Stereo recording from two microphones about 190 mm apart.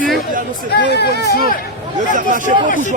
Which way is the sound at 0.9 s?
60° left (ahead or behind).